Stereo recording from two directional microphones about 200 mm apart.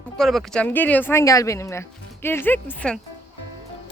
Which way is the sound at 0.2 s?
Centre (ahead or behind).